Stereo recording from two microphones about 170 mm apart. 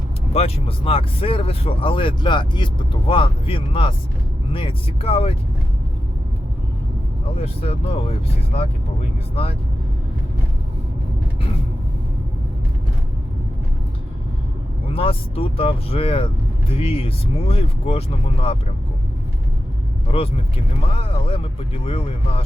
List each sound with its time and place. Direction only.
0.3 s speech: 35° left (ahead or behind)
7.3 s speech: 35° left (ahead or behind)
9.3 s speech: 35° left (ahead or behind)
14.8 s speech: 35° left (ahead or behind)
20.1 s speech: 35° left (ahead or behind)